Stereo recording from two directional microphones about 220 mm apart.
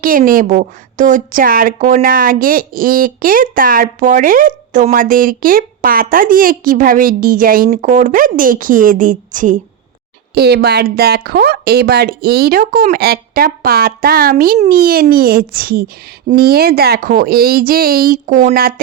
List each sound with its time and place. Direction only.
0.0 s a woman's voice: 40° right (ahead or behind)
10.3 s speech: 45° right (ahead or behind)